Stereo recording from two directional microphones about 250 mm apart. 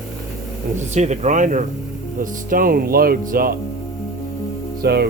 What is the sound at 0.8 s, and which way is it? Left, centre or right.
Speech, right.